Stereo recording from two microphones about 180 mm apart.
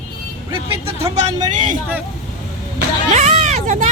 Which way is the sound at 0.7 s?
35° right (ahead or behind).